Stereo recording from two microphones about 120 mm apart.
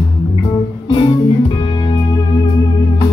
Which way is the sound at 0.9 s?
40° left (ahead or behind).